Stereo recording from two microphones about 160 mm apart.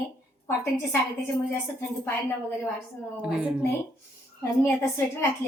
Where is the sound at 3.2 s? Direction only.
5° right (ahead or behind).